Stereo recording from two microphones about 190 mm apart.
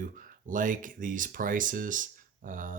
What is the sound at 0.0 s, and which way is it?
Speech, 45° right (ahead or behind).